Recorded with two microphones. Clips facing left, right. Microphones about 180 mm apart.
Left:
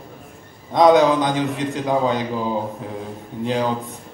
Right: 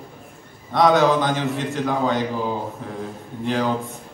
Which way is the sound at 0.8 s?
15° left (ahead or behind).